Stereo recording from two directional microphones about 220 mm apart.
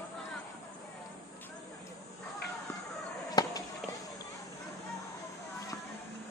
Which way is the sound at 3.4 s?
20° left (ahead or behind).